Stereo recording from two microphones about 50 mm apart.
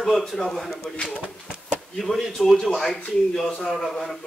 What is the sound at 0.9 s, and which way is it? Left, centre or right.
A man's voice, centre.